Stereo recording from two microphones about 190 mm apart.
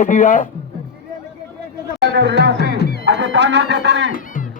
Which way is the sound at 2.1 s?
65° right (ahead or behind).